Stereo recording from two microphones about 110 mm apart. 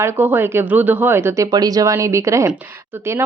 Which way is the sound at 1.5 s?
35° right (ahead or behind).